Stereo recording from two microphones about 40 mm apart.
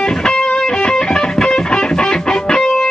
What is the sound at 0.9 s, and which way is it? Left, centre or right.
Music, centre.